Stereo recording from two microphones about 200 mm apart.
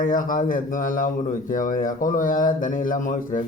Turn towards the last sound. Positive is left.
turn(degrees=40)  # may be behind; listen again after turning